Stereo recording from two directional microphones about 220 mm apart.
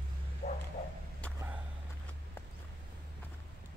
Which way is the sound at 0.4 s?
35° left (ahead or behind).